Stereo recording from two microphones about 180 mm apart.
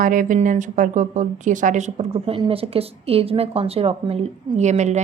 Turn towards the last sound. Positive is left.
turn(degrees=-40)  # may be behind; listen again after turning